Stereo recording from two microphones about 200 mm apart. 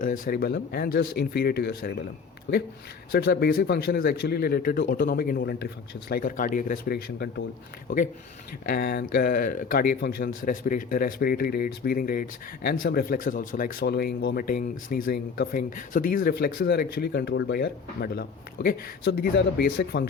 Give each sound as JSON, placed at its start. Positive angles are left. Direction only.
{"t": 0.0, "sound": "speech", "side_deg": 45}
{"t": 2.5, "sound": "speech", "side_deg": 65}
{"t": 3.1, "sound": "speech", "side_deg": 50}
{"t": 5.4, "sound": "speech", "side_deg": 60}
{"t": 8.6, "sound": "speech", "side_deg": 50}